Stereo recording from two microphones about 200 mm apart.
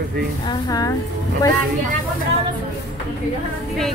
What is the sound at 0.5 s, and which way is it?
Speech, 20° left (ahead or behind).